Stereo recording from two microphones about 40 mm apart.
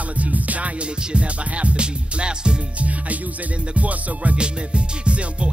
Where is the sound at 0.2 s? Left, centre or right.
Right.